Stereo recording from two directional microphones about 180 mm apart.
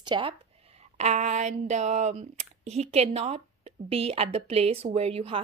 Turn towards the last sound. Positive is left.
turn(degrees=-35)  # may be behind; listen again after turning